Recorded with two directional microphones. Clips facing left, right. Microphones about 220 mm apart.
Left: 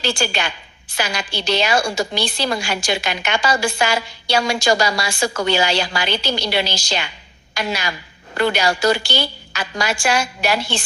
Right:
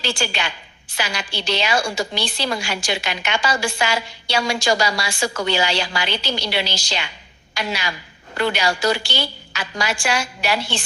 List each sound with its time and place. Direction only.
0.0 s a woman's voice: 45° left (ahead or behind)